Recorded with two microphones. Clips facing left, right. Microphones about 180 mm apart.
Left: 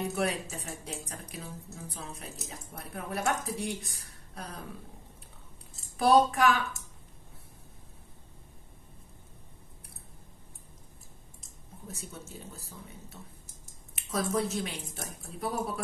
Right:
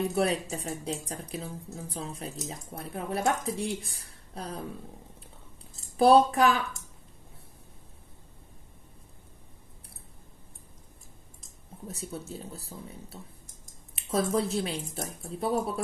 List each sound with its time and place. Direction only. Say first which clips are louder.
0.1 s a woman's voice: right 4 dB; 35° right (ahead or behind)
5.9 s speech: right 3 dB; 30° right (ahead or behind)
11.9 s speech: right 6 dB; 35° right (ahead or behind)